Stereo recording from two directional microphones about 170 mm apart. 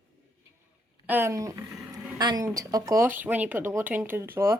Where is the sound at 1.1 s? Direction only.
15° right (ahead or behind).